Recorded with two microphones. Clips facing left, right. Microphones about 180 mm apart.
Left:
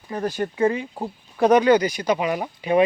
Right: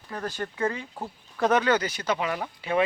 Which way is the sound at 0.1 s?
15° left (ahead or behind).